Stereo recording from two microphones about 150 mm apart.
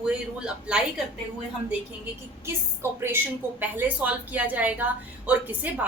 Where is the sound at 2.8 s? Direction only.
15° right (ahead or behind).